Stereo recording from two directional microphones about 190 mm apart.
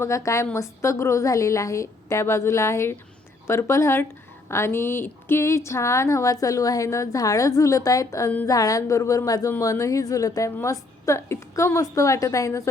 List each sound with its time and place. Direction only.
0.0 s speech: 15° left (ahead or behind)